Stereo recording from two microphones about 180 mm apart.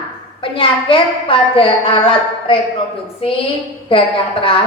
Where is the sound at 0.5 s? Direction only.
30° left (ahead or behind).